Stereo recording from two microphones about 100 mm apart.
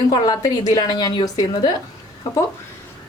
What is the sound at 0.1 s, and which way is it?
A woman's voice, 40° left (ahead or behind).